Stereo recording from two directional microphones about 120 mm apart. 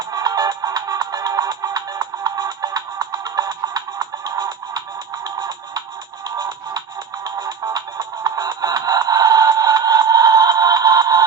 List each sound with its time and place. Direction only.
0.0 s music: 30° right (ahead or behind)